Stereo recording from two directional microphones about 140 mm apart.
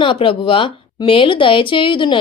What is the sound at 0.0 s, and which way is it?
A woman's voice, 40° left (ahead or behind).